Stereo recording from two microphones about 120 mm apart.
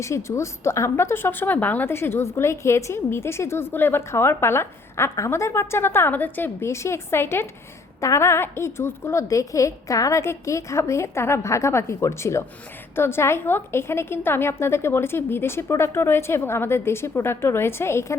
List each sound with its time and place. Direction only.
0.0 s a woman's voice: 25° left (ahead or behind)